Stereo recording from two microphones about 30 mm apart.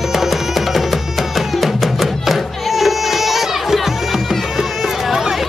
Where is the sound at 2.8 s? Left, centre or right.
Centre.